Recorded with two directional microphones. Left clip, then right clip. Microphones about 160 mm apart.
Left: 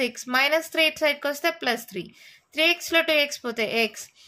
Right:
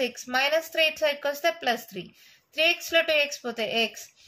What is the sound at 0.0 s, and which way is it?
A woman's voice, 50° left (ahead or behind).